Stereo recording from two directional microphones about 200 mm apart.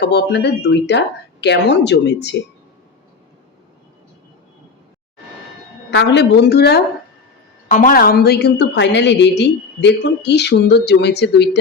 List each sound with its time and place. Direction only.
0.0 s a woman's voice: 55° left (ahead or behind)
5.9 s a woman's voice: 60° left (ahead or behind)
7.7 s a woman's voice: 40° left (ahead or behind)